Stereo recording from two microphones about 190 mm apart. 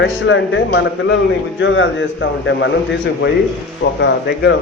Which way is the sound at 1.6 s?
85° left.